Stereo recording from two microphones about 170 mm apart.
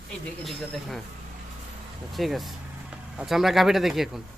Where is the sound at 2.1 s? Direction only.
Centre (ahead or behind).